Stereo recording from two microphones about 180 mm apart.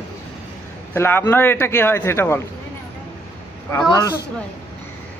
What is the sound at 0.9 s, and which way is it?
A woman's voice, 15° left (ahead or behind).